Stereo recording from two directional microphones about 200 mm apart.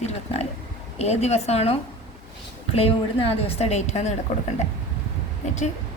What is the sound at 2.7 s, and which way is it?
A woman's voice, 30° left (ahead or behind).